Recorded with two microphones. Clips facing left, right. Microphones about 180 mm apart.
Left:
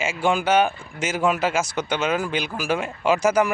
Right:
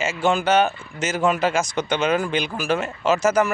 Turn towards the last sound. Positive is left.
turn(degrees=10)  # may be behind; listen again after turning